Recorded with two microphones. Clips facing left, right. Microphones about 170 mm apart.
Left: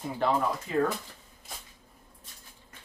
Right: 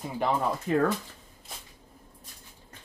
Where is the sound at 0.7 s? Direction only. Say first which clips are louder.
Right 3 dB; 55° right (ahead or behind).